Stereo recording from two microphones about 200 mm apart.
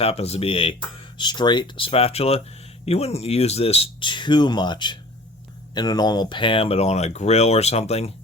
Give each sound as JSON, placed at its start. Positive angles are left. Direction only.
{"t": 0.0, "sound": "speech", "side_deg": 30}